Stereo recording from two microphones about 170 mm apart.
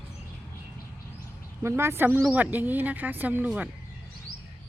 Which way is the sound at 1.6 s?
15° right (ahead or behind).